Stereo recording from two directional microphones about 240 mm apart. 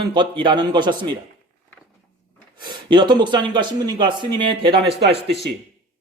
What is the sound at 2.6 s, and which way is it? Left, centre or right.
A man's voice, centre.